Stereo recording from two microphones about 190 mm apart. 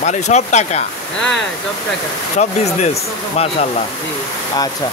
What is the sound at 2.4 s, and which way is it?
Speech, 40° left (ahead or behind).